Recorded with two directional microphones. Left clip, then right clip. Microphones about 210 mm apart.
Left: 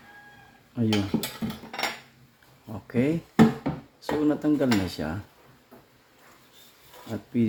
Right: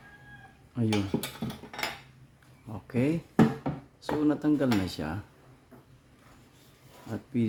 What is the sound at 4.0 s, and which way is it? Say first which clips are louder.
Speech: left 2 dB; 5° right (ahead or behind).